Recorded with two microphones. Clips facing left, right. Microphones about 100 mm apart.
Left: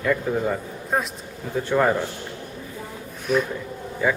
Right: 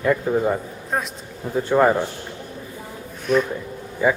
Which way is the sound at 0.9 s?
Centre (ahead or behind).